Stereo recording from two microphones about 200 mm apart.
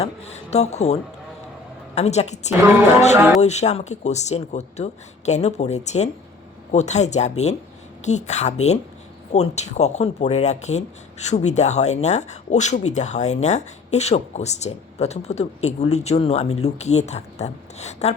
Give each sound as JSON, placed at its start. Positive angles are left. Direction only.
{"t": 0.0, "sound": "speech", "side_deg": 35}
{"t": 2.0, "sound": "speech", "side_deg": 35}
{"t": 2.5, "sound": "speech", "side_deg": -10}
{"t": 3.4, "sound": "speech", "side_deg": 35}